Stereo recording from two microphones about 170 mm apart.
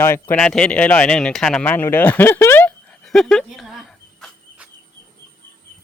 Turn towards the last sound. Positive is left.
turn(degrees=0)  # may be behind; listen again after turning